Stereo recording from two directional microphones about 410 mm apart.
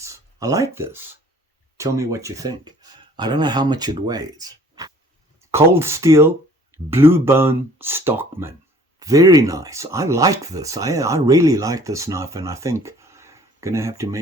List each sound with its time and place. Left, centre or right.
0.0 s speech: centre